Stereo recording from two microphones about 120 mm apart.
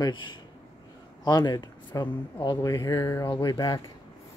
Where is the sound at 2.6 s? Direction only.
30° left (ahead or behind).